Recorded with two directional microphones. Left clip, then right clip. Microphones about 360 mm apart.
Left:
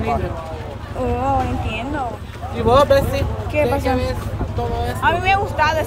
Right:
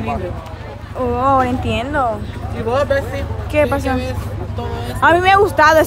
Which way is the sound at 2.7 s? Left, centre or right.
Centre.